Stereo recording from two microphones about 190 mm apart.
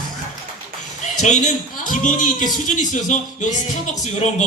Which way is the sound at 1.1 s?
40° left (ahead or behind).